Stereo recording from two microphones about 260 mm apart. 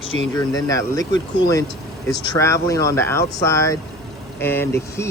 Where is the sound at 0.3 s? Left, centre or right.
Centre.